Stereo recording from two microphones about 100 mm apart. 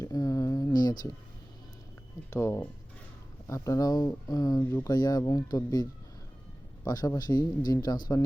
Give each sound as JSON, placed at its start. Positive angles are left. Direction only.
{"t": 0.0, "sound": "a sound", "side_deg": 35}
{"t": 2.3, "sound": "speech", "side_deg": 30}
{"t": 4.6, "sound": "speech", "side_deg": 25}
{"t": 4.9, "sound": "speech", "side_deg": 40}